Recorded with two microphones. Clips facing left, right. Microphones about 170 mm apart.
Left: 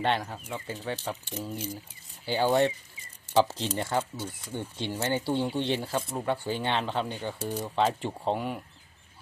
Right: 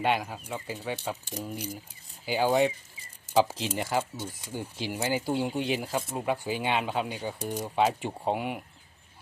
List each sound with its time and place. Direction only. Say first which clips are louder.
0.0 s speech: right 1 dB; 10° right (ahead or behind)